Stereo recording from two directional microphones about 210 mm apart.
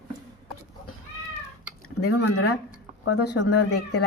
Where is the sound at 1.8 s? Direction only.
90° left.